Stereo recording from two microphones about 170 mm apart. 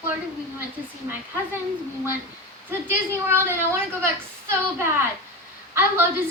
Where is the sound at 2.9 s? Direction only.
15° right (ahead or behind).